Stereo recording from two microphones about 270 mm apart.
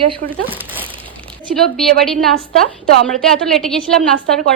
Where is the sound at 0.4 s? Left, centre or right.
Centre.